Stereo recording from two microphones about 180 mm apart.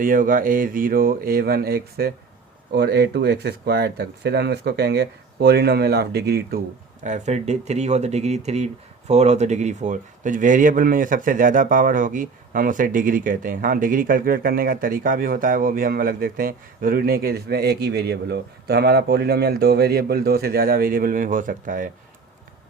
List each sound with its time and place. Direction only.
0.0 s speech: 50° right (ahead or behind)
7.0 s speech: 40° right (ahead or behind)